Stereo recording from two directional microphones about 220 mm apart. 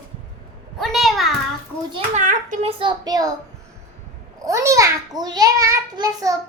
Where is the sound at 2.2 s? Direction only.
35° right (ahead or behind); by 3.3 s 15° right (ahead or behind).